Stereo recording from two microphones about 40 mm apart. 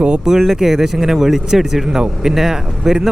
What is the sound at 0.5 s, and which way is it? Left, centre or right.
Speech, centre.